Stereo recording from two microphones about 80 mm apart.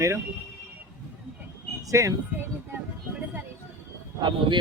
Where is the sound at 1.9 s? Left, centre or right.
Right.